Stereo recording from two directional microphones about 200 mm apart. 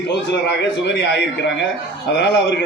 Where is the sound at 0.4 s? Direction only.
60° left (ahead or behind).